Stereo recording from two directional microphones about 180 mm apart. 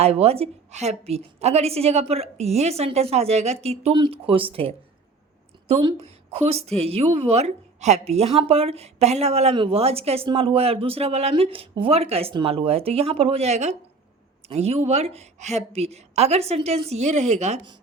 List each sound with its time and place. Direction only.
0.0 s speech: 35° right (ahead or behind)